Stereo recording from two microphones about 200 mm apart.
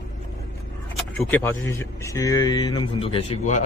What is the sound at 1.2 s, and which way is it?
A man's voice, 10° left (ahead or behind).